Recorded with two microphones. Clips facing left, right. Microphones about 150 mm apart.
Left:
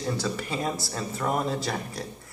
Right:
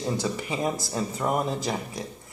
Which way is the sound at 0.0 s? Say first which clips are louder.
Right 1 dB; 20° right (ahead or behind).